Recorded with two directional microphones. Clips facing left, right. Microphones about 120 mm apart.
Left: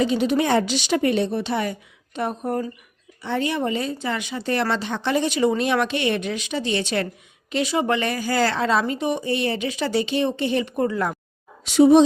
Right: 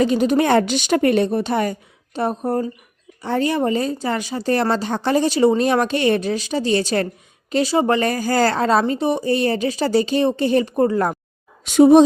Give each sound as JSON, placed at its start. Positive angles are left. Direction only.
{"t": 0.0, "sound": "a woman's voice", "side_deg": -45}